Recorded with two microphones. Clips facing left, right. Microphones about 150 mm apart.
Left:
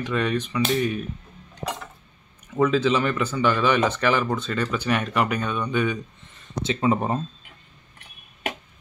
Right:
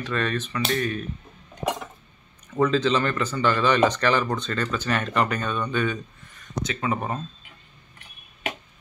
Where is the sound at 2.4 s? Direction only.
5° left (ahead or behind).